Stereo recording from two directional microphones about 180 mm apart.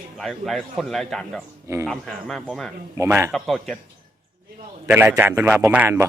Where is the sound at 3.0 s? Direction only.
15° right (ahead or behind).